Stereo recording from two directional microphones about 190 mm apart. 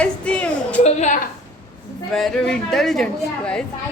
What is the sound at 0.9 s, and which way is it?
Speech, 40° left (ahead or behind).